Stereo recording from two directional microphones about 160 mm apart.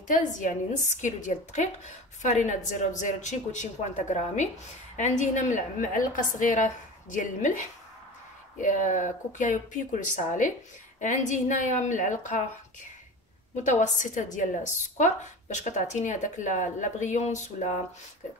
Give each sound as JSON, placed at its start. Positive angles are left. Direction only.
{"t": 0.1, "sound": "a woman's voice", "side_deg": 55}
{"t": 8.5, "sound": "a woman's voice", "side_deg": 50}
{"t": 13.7, "sound": "a woman's voice", "side_deg": 50}